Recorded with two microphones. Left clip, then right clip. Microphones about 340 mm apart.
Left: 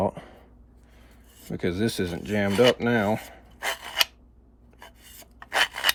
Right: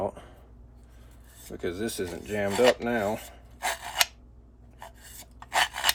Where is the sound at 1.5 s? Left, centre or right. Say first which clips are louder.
Left 5 dB; left.